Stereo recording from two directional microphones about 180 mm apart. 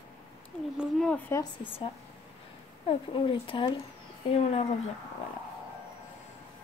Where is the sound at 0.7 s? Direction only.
5° left (ahead or behind).